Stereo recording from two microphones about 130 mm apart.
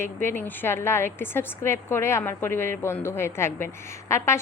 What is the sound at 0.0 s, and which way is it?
A woman's voice, 15° left (ahead or behind).